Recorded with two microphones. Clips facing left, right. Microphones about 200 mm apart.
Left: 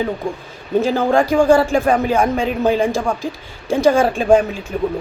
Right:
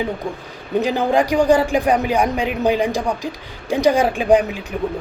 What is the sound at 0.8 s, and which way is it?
A man's voice, 15° right (ahead or behind).